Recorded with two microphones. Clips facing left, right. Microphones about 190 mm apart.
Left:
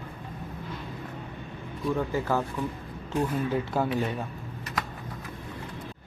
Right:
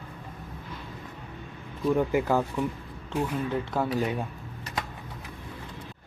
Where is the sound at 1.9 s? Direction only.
15° right (ahead or behind).